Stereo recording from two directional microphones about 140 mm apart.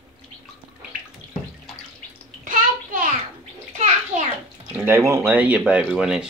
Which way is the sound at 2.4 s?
75° right (ahead or behind).